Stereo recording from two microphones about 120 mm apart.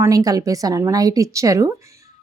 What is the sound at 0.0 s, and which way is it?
A woman's voice, 30° right (ahead or behind).